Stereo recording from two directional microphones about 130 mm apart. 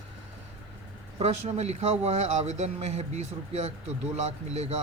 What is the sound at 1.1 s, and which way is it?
Speech, 55° right (ahead or behind).